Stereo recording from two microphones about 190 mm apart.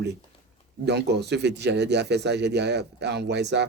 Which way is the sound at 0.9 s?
60° right (ahead or behind).